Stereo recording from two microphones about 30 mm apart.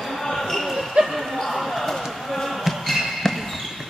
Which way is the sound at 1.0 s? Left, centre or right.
Right.